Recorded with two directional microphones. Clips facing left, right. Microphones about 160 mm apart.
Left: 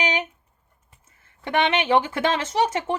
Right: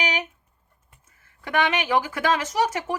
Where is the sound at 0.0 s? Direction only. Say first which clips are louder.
Left 2 dB; 25° left (ahead or behind).